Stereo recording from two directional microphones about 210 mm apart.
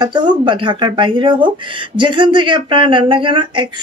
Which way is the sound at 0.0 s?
20° right (ahead or behind).